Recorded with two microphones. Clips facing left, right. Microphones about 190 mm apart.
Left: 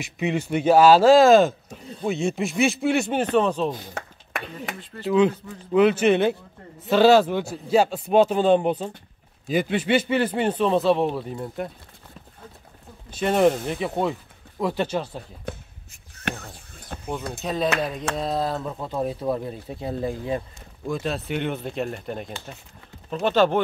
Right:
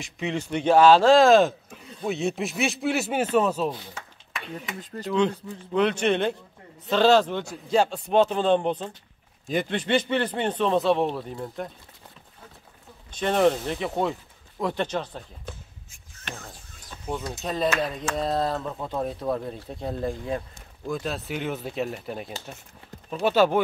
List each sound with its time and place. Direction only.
0.0 s speech: 5° left (ahead or behind)
3.9 s a sound: 60° left (ahead or behind)
5.0 s speech: 5° left (ahead or behind)
13.1 s speech: 5° left (ahead or behind)
16.9 s a sound: 55° left (ahead or behind)
17.4 s speech: centre (ahead or behind)